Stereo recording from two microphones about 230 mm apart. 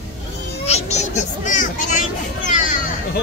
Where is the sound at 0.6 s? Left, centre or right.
Left.